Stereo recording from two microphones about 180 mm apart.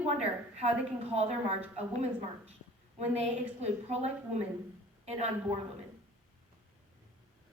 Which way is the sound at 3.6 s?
35° right (ahead or behind).